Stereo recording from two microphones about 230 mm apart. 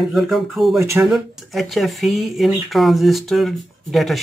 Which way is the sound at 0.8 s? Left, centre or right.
Centre.